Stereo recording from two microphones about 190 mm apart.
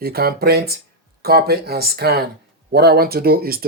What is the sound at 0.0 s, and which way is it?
Speech, 55° right (ahead or behind).